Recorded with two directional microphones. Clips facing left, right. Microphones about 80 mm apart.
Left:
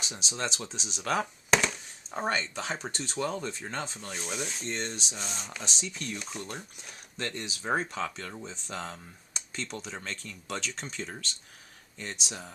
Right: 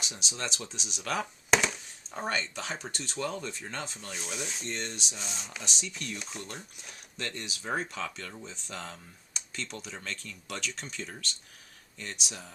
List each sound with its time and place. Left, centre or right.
0.0 s speech: left
1.5 s chop: centre
2.1 s speech: left
3.9 s speech: centre
4.6 s speech: left
5.1 s speech: centre
5.6 s speech: left
6.1 s speech: centre
7.2 s speech: left
9.3 s computer keyboard: left
9.8 s speech: left